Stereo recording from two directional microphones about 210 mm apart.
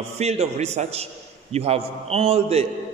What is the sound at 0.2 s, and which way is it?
A man's voice, 30° right (ahead or behind).